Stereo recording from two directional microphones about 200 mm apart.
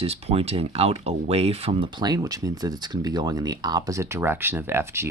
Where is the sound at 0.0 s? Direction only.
30° right (ahead or behind).